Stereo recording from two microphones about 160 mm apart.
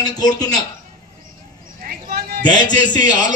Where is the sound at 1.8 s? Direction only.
70° right (ahead or behind).